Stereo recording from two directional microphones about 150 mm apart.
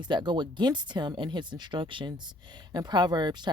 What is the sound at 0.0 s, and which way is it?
Speech, 30° right (ahead or behind).